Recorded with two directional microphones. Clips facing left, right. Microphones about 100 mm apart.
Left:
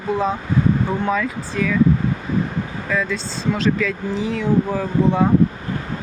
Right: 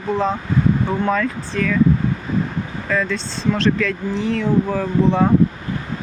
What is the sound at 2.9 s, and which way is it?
Speech, 5° left (ahead or behind).